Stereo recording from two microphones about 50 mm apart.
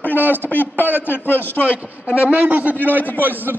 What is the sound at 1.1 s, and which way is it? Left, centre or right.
Speech, left.